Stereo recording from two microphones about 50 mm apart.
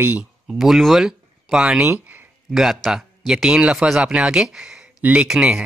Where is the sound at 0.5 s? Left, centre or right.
Centre.